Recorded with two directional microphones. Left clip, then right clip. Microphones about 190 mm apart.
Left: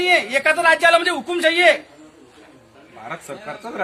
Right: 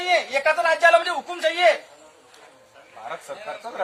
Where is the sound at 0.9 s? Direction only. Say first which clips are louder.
Left 2 dB; 10° left (ahead or behind).